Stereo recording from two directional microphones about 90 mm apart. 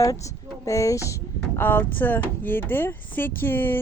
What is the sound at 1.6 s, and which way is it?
Speech, 20° left (ahead or behind).